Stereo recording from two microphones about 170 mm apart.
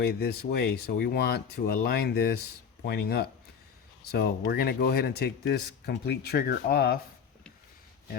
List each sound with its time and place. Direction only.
0.0 s speech: 65° left (ahead or behind)